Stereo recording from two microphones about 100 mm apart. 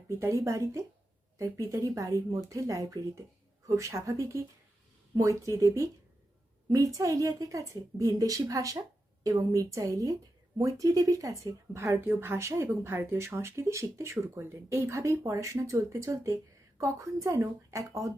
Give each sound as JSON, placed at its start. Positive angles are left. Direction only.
{"t": 0.2, "sound": "speech", "side_deg": -30}